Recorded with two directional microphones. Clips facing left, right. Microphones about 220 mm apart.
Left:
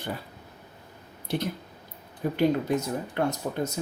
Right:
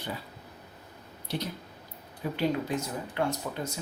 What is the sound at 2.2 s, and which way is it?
Speech, 45° left (ahead or behind).